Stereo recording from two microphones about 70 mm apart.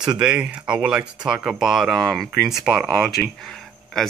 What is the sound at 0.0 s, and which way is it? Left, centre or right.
Speech, centre.